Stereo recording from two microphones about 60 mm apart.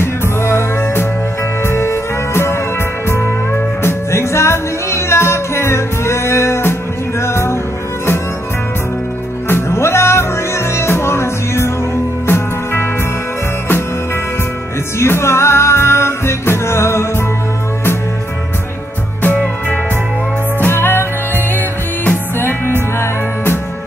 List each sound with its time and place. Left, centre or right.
0.0 s music: left
3.8 s music: left
9.5 s music: left
15.0 s music: left
19.2 s music: left
20.6 s music: left
22.4 s music: left